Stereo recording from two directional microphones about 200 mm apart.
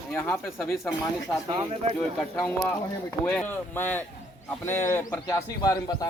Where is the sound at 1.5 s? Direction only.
25° right (ahead or behind).